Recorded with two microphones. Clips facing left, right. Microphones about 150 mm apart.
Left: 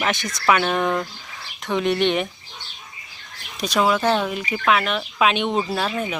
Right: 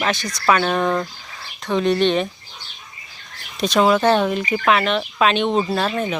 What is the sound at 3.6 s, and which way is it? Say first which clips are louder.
Speech: right 4 dB; 5° left (ahead or behind).